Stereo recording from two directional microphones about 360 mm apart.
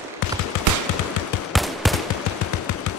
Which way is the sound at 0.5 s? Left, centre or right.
Left.